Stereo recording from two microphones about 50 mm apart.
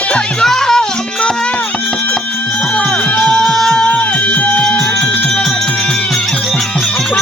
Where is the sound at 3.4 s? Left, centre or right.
Centre.